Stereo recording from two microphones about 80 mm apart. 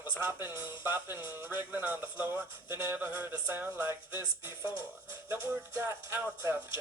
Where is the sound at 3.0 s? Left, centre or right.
Right.